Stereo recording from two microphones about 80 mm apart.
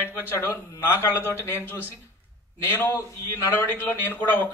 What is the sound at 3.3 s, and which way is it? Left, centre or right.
A man's voice, left.